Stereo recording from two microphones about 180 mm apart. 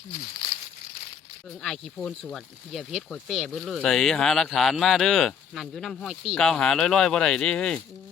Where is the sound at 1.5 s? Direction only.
5° left (ahead or behind).